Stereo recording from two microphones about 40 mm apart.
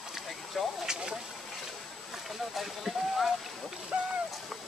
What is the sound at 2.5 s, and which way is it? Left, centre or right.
Speech, centre.